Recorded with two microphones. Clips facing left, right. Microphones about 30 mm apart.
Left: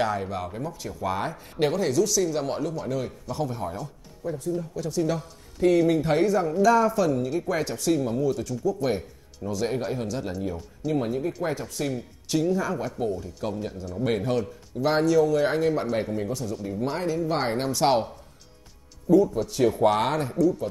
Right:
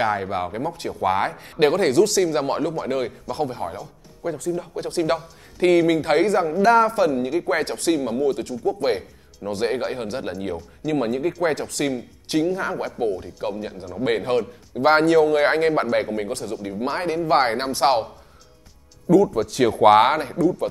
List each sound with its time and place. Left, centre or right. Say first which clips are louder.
0.0 s speech: right 4 dB; right
4.2 s speech: right 3 dB; right
4.7 s speech: right 5 dB; right
6.4 s speech: right 4 dB; right
10.9 s speech: right 4 dB; right
11.9 s speech: right 3 dB; right
14.0 s speech: right 4 dB; right
16.6 s speech: right 3 dB; right
19.0 s speech: right 3 dB; right
19.8 s speech: right 11 dB; right
20.1 s speech: right 3 dB; right